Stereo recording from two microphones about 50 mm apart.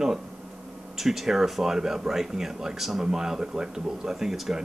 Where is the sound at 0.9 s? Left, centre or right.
Centre.